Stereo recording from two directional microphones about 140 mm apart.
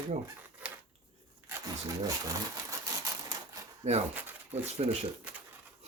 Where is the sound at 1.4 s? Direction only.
25° right (ahead or behind).